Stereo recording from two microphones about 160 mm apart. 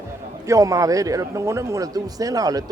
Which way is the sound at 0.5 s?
20° right (ahead or behind).